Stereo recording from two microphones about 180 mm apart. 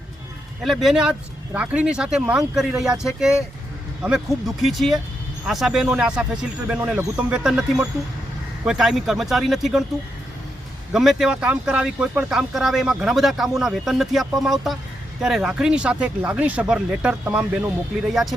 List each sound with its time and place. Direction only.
0.6 s speech: centre (ahead or behind)
10.9 s speech: centre (ahead or behind)